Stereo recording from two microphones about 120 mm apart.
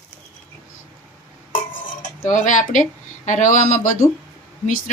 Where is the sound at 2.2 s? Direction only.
90° left.